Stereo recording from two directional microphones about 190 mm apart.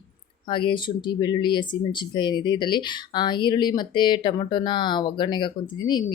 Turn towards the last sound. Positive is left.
turn(degrees=20)  # may be behind; listen again after turning